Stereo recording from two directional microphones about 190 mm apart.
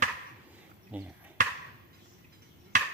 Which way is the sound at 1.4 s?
45° right (ahead or behind).